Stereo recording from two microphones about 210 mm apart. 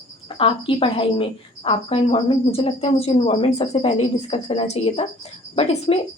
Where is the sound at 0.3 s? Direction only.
25° left (ahead or behind).